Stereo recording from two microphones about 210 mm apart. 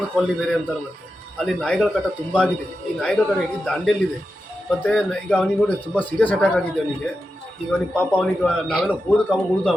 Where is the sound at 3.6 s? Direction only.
Centre (ahead or behind).